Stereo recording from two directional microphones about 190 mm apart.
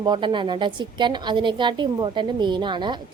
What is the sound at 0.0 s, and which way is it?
A woman's voice, 25° right (ahead or behind).